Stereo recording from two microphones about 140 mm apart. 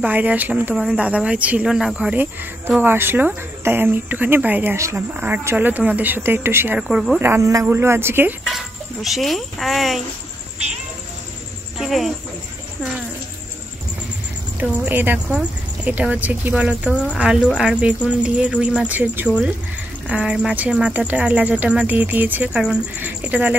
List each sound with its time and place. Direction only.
0.0 s speech: 10° right (ahead or behind)
6.8 s a woman's voice: 5° right (ahead or behind)
7.2 s speech: 20° right (ahead or behind)
8.5 s speech: centre (ahead or behind)
11.8 s speech: centre (ahead or behind)
14.6 s speech: 15° right (ahead or behind)